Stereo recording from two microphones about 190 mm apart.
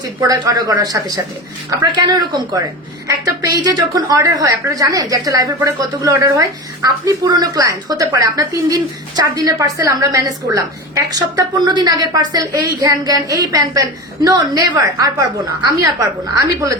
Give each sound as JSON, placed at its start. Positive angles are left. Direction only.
{"t": 0.2, "sound": "a woman's voice", "side_deg": -20}